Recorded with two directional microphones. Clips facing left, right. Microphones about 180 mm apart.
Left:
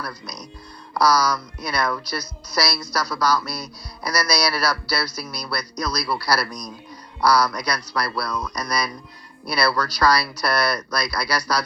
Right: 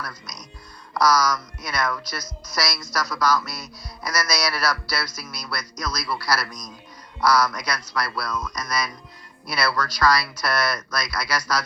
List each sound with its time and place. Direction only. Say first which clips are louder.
0.0 s speech: left 4 dB; 35° left (ahead or behind)